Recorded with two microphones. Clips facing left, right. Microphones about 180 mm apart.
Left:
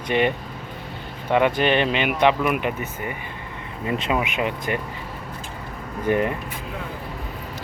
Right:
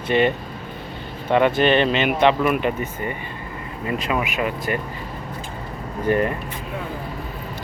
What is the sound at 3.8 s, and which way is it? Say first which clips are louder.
Speech: even; 25° left (ahead or behind).